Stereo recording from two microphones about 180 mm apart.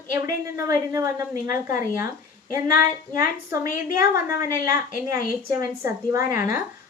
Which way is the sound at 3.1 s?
15° right (ahead or behind).